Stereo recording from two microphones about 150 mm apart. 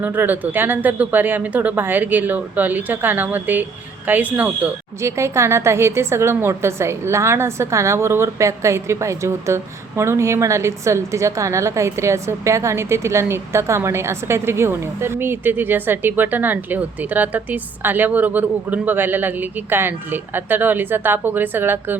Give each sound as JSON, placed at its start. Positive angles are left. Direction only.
{"t": 0.0, "sound": "speech", "side_deg": -15}